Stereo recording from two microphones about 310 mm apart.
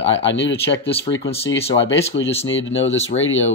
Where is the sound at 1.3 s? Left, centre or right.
Centre.